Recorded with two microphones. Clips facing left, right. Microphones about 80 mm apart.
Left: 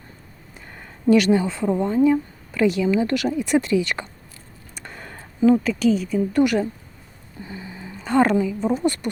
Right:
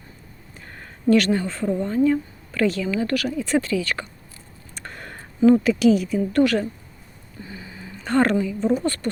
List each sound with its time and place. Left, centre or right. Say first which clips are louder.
0.8 s speech: left 1 dB; centre
4.7 s a sound: right 1 dB; centre
5.5 s a woman's voice: right 2 dB; centre
6.3 s speech: even; centre
7.4 s a sound: left 3 dB; left
8.0 s speech: left 2 dB; centre
8.7 s speech: even; centre